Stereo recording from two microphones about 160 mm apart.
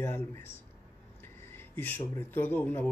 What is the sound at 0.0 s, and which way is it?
Speech, 15° left (ahead or behind).